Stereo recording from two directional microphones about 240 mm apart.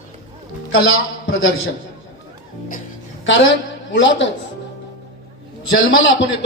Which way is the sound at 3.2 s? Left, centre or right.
Left.